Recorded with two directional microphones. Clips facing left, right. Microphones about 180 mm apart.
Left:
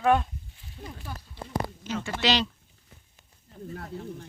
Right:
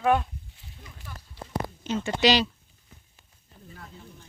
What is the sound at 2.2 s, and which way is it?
Speech, 10° right (ahead or behind).